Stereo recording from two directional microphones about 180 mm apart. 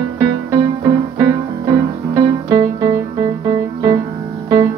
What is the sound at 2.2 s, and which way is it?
Music, 20° right (ahead or behind).